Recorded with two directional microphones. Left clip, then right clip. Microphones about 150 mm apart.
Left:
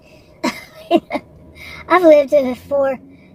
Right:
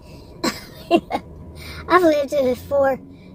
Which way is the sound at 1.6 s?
35° left (ahead or behind).